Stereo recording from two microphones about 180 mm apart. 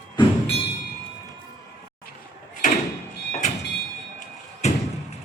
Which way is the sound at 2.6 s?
45° left (ahead or behind).